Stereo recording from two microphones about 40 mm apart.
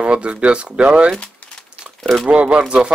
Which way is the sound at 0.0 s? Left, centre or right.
Right.